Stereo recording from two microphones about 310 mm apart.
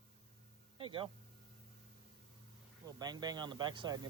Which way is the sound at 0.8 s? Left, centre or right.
Centre.